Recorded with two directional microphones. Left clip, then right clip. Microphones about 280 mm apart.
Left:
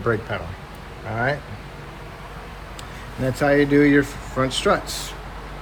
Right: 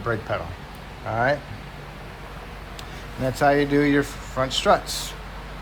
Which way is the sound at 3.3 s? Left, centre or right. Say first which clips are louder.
Left 2 dB; centre.